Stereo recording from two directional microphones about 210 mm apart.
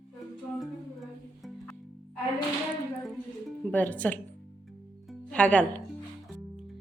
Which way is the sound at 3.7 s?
5° left (ahead or behind).